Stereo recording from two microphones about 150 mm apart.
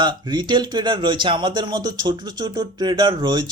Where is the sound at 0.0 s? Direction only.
30° right (ahead or behind).